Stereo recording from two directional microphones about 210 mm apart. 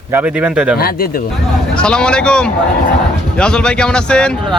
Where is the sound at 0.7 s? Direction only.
45° left (ahead or behind).